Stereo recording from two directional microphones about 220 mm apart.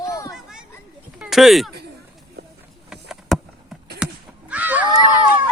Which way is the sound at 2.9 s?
Centre (ahead or behind).